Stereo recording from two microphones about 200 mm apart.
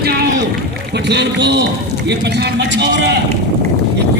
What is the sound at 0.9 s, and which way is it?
A man's voice, 55° right (ahead or behind).